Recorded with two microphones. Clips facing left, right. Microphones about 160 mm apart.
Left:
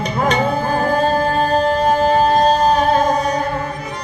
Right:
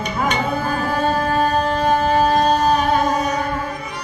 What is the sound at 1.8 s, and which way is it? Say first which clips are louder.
Music: even; 40° left (ahead or behind).